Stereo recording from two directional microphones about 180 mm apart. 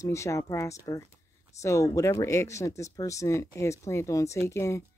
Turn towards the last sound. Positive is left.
turn(degrees=15)  # may be behind; listen again after turning